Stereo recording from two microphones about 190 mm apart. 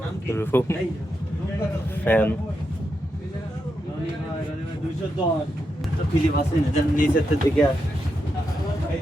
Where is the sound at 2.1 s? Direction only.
10° left (ahead or behind).